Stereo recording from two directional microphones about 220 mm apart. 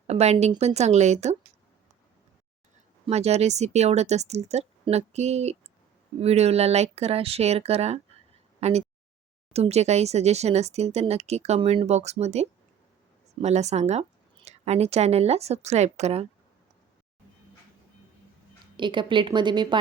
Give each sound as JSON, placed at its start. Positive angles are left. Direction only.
{"t": 0.1, "sound": "speech", "side_deg": -30}
{"t": 3.1, "sound": "speech", "side_deg": -30}
{"t": 8.6, "sound": "a sound", "side_deg": -30}
{"t": 9.5, "sound": "speech", "side_deg": -30}
{"t": 18.8, "sound": "speech", "side_deg": -20}